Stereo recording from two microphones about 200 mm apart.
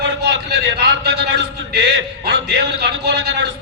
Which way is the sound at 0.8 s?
55° right (ahead or behind).